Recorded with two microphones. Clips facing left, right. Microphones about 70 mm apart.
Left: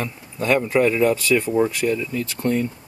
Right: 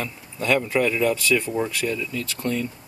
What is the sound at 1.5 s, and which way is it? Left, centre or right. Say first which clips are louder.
Speech: left 5 dB; centre.